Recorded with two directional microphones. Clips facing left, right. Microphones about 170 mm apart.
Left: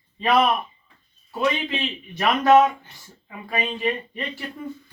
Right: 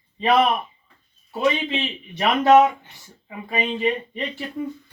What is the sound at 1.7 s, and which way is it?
Speech, 20° right (ahead or behind).